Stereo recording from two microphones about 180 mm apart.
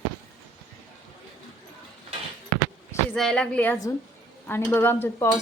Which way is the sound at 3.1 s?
5° left (ahead or behind).